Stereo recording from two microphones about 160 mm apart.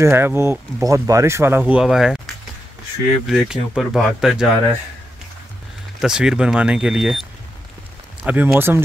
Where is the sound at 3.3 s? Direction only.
5° right (ahead or behind).